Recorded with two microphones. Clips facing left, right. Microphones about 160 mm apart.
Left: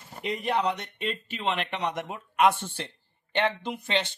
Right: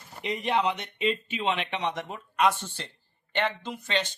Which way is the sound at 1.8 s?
10° left (ahead or behind).